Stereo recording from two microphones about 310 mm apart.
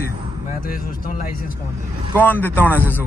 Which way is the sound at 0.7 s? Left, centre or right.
Left.